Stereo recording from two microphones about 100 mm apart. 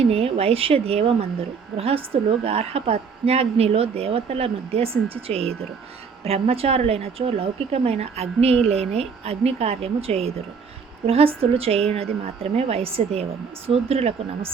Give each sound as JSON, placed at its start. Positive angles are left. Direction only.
{"t": 0.1, "sound": "a woman's voice", "side_deg": -80}
{"t": 2.4, "sound": "a woman's voice", "side_deg": -90}
{"t": 11.0, "sound": "a woman's voice", "side_deg": -75}